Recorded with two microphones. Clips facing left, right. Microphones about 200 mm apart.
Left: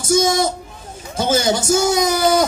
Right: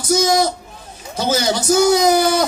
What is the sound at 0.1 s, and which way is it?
Speech, 25° left (ahead or behind).